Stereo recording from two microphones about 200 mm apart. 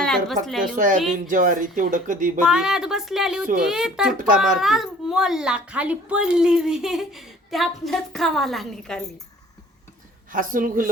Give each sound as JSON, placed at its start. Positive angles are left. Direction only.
{"t": 0.0, "sound": "a child's voice", "side_deg": 0}
{"t": 0.8, "sound": "speech", "side_deg": -40}
{"t": 2.4, "sound": "a child's voice", "side_deg": -5}
{"t": 10.3, "sound": "speech", "side_deg": -45}